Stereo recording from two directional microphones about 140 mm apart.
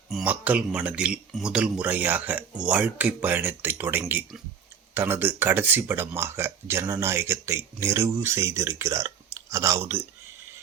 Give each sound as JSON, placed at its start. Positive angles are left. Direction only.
{"t": 0.3, "sound": "speech", "side_deg": -10}